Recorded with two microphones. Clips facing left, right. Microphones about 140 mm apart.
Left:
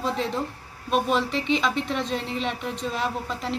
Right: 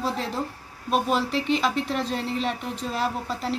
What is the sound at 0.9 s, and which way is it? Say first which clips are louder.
A woman's voice: even; 5° right (ahead or behind).